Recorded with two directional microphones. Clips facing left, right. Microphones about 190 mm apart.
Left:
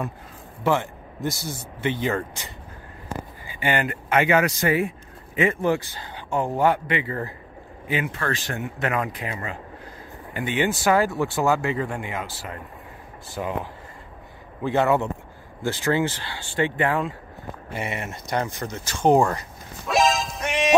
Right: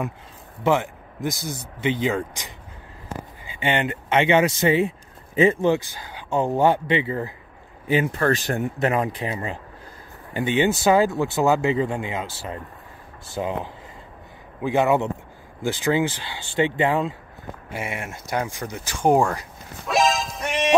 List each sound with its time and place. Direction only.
0.7 s speech: 15° right (ahead or behind)
3.4 s speech: 25° right (ahead or behind)
7.9 s speech: 35° right (ahead or behind)
14.6 s speech: 15° right (ahead or behind)
17.7 s speech: centre (ahead or behind)
19.9 s music: centre (ahead or behind)